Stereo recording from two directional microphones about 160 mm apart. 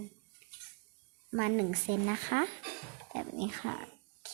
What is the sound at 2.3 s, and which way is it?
Speech, 60° right (ahead or behind).